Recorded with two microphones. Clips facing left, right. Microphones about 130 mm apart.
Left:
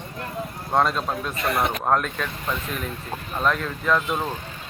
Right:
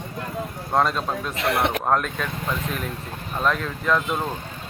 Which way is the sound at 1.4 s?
80° right.